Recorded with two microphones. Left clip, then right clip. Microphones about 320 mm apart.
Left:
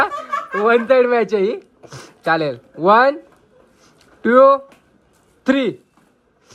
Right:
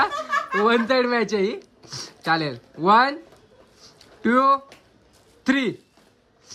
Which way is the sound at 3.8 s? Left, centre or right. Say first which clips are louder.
Left 5 dB; centre.